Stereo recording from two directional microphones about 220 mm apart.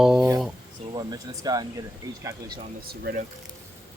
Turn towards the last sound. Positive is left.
turn(degrees=-45)  # may be behind; listen again after turning